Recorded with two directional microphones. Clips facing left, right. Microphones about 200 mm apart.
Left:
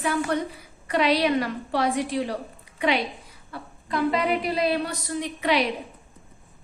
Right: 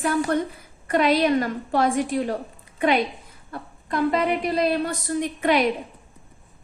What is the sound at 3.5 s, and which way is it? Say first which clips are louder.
A woman's voice: right 2 dB; 50° right (ahead or behind).